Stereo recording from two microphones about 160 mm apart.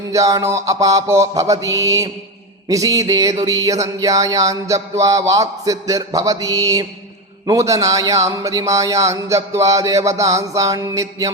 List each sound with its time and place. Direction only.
0.1 s speech: 20° right (ahead or behind)